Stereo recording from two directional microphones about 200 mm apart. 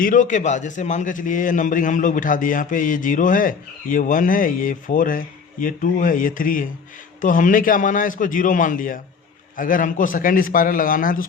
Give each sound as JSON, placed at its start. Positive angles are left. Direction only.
{"t": 0.0, "sound": "a man's voice", "side_deg": 40}